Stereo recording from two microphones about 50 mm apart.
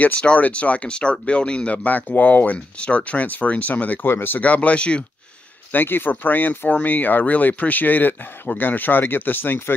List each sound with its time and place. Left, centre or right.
0.4 s speech: left
4.0 s speech: left
4.4 s speech: left
5.7 s speech: left